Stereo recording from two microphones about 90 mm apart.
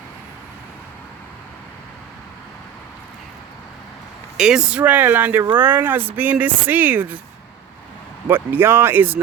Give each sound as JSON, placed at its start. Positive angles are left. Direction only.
{"t": 4.4, "sound": "speech", "side_deg": -10}
{"t": 4.8, "sound": "speech", "side_deg": -20}
{"t": 8.3, "sound": "speech", "side_deg": -25}